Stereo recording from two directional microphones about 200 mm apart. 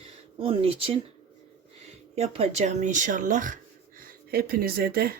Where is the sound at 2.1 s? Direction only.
30° right (ahead or behind); by 5.2 s 50° right (ahead or behind).